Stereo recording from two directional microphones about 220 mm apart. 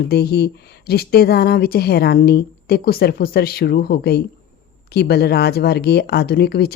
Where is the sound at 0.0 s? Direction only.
45° left (ahead or behind).